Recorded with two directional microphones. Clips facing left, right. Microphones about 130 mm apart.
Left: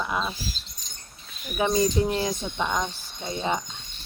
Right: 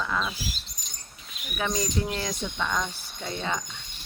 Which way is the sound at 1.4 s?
20° left (ahead or behind).